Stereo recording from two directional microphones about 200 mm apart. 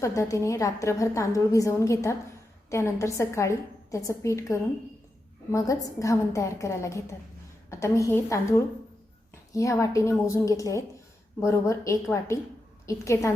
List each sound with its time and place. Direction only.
0.0 s a woman's voice: 15° left (ahead or behind)